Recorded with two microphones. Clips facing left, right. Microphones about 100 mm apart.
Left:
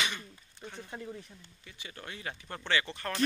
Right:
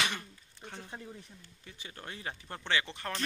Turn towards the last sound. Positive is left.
turn(degrees=-20)  # may be behind; listen again after turning